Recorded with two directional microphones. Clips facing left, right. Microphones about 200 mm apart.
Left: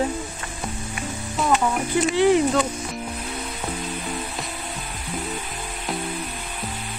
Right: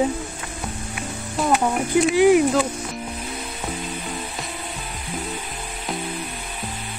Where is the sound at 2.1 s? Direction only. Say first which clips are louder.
Right 2 dB; 10° right (ahead or behind).